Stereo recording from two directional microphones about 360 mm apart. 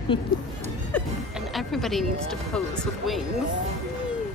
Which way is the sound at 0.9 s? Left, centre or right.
Centre.